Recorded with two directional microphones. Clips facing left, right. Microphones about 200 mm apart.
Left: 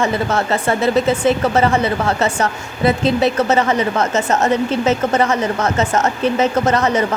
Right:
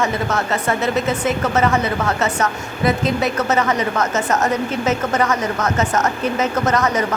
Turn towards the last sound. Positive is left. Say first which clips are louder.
# left 3 dB
turn(degrees=30)  # may be behind; listen again after turning